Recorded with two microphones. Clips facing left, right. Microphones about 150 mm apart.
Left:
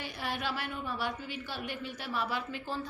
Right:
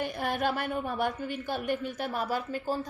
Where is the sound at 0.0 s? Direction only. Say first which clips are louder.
Right 7 dB; 50° right (ahead or behind).